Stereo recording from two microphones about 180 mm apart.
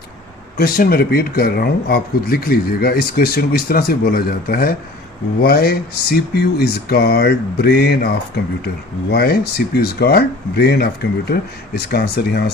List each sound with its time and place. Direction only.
0.5 s speech: 55° left (ahead or behind)